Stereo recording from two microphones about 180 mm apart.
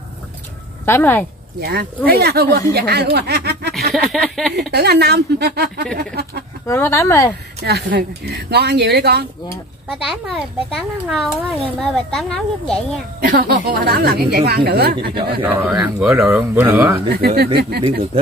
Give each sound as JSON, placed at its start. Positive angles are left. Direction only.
{"t": 0.8, "sound": "speech", "side_deg": 10}
{"t": 1.6, "sound": "a woman's voice", "side_deg": -60}
{"t": 3.9, "sound": "a child's voice", "side_deg": 0}
{"t": 4.6, "sound": "a woman's voice", "side_deg": -65}
{"t": 6.7, "sound": "speech", "side_deg": 15}
{"t": 7.6, "sound": "a woman's voice", "side_deg": -65}
{"t": 10.0, "sound": "a child's voice", "side_deg": 0}
{"t": 13.2, "sound": "a woman's voice", "side_deg": -55}
{"t": 15.4, "sound": "speech", "side_deg": -10}
{"t": 17.1, "sound": "a woman's voice", "side_deg": -60}